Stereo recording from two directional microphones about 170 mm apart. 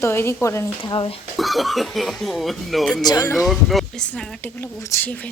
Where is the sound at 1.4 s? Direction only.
Centre (ahead or behind).